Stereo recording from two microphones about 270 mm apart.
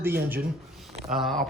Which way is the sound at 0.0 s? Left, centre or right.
Centre.